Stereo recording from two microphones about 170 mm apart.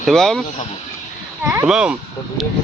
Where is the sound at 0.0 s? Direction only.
Centre (ahead or behind).